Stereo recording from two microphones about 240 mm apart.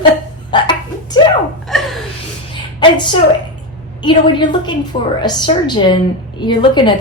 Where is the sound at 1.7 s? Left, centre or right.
Centre.